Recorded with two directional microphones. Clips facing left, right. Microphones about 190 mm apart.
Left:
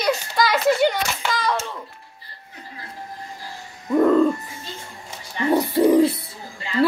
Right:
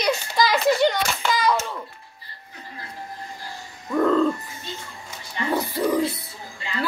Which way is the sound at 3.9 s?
15° left (ahead or behind).